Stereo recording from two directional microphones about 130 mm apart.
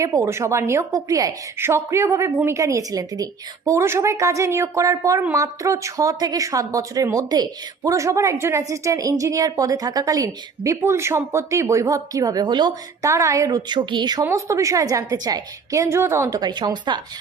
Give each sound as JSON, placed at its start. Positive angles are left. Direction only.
{"t": 0.0, "sound": "a woman's voice", "side_deg": -25}
{"t": 13.1, "sound": "a woman's voice", "side_deg": -25}
{"t": 14.3, "sound": "a woman's voice", "side_deg": -25}
{"t": 16.4, "sound": "speech", "side_deg": -35}